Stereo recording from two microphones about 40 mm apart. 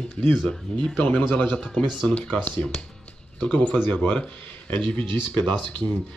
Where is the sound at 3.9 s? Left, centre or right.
Left.